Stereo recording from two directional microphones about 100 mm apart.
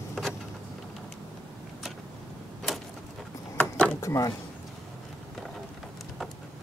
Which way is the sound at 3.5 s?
10° left (ahead or behind).